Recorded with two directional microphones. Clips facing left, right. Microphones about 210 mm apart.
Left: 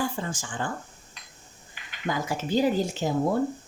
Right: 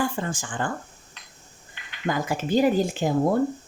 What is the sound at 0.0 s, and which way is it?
Speech, 55° right (ahead or behind).